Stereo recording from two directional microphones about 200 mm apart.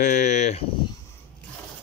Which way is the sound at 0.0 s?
35° left (ahead or behind).